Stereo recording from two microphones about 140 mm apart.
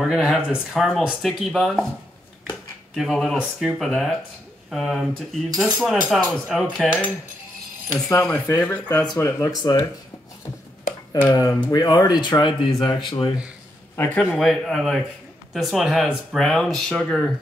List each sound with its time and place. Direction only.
0.0 s speech: centre (ahead or behind)
2.9 s speech: 5° left (ahead or behind)
7.9 s speech: 15° left (ahead or behind)
8.8 s speech: 25° left (ahead or behind)
11.2 s speech: 25° left (ahead or behind)
13.9 s speech: 10° left (ahead or behind)